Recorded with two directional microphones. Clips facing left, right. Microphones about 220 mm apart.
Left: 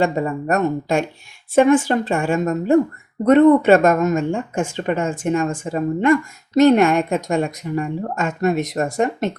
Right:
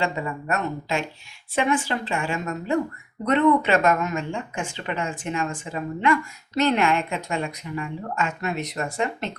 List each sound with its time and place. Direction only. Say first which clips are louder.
0.0 s speech: left 8 dB; 45° left (ahead or behind)